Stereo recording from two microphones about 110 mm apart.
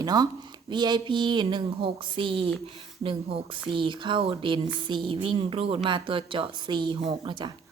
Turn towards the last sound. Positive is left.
turn(degrees=-45)  # may be behind; listen again after turning